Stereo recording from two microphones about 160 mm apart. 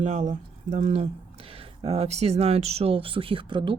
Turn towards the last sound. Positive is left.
turn(degrees=-30)  # may be behind; listen again after turning